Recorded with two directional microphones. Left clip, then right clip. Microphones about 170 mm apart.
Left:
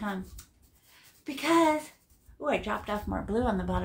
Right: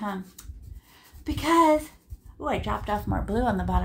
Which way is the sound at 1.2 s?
30° right (ahead or behind).